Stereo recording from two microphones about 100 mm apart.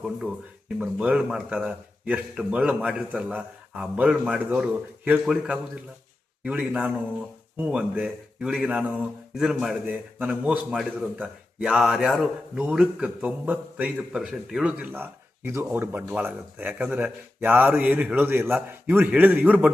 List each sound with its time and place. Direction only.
0.8 s speech: 10° right (ahead or behind)
5.2 s a man's voice: 5° right (ahead or behind)